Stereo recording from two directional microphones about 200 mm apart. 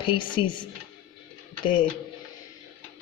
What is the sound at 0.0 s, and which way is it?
Speech, 25° left (ahead or behind).